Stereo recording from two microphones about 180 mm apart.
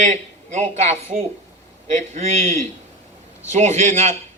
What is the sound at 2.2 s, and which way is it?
A man's voice, 40° right (ahead or behind).